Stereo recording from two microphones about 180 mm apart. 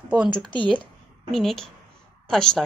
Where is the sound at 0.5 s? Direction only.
30° left (ahead or behind).